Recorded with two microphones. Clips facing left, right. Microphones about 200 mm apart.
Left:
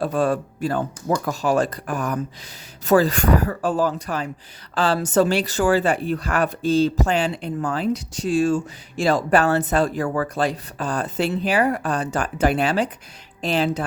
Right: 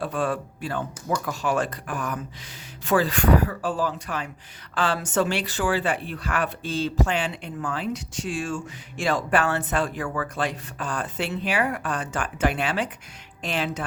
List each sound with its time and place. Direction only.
0.0 s speech: 40° left (ahead or behind)